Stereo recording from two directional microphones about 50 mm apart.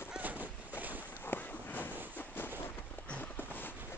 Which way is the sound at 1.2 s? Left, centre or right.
Left.